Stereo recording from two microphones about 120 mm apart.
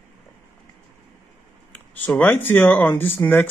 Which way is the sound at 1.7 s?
15° left (ahead or behind).